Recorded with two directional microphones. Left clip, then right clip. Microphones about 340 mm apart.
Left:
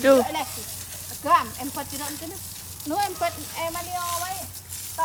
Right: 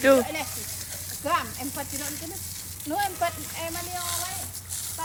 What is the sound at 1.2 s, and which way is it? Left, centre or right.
Speech, left.